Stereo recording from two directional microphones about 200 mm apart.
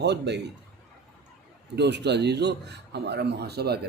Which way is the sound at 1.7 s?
60° right (ahead or behind).